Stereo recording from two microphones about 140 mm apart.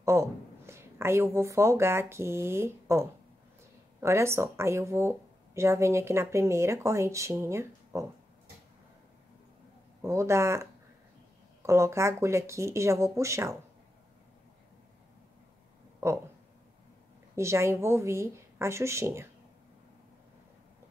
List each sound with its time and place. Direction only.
0.0 s speech: 20° right (ahead or behind)
10.0 s speech: 20° right (ahead or behind)
17.4 s speech: 20° right (ahead or behind)